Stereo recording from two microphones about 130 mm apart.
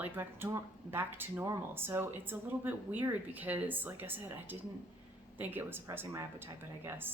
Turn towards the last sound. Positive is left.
turn(degrees=-20)  # may be behind; listen again after turning